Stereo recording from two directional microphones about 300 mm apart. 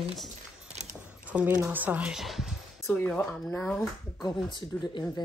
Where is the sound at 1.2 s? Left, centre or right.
Centre.